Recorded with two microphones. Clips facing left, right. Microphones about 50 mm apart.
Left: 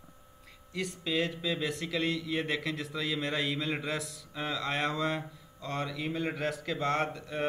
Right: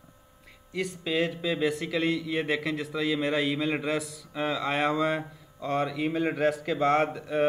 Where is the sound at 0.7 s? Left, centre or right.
Centre.